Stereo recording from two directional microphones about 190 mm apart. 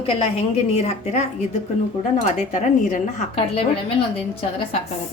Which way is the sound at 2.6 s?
40° left (ahead or behind).